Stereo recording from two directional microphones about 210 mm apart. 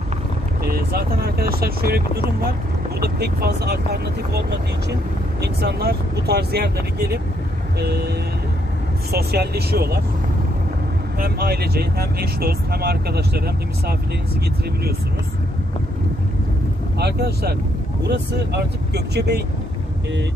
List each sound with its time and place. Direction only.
0.7 s speech: 50° right (ahead or behind)
11.1 s speech: 45° right (ahead or behind)
17.0 s speech: 50° right (ahead or behind)